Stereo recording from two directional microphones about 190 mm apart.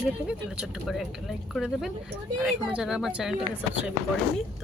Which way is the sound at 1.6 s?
5° right (ahead or behind).